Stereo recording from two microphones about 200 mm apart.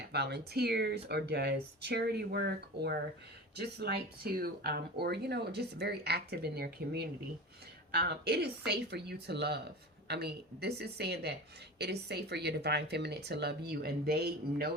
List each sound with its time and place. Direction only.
0.0 s speech: 55° right (ahead or behind)